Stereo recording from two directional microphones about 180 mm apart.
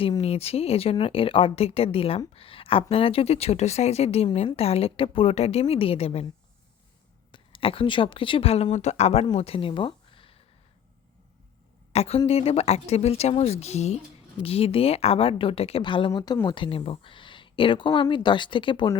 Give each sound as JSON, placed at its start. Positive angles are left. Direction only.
{"t": 0.0, "sound": "a woman's voice", "side_deg": 35}
{"t": 7.3, "sound": "a woman's voice", "side_deg": 30}
{"t": 11.9, "sound": "a woman's voice", "side_deg": 35}